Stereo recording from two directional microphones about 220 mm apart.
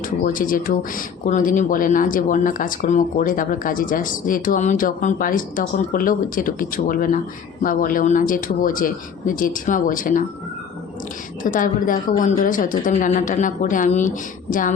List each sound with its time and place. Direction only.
0.3 s speech: 40° left (ahead or behind)
11.4 s speech: 40° left (ahead or behind)